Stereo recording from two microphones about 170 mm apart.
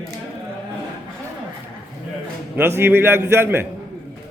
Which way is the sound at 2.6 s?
15° right (ahead or behind).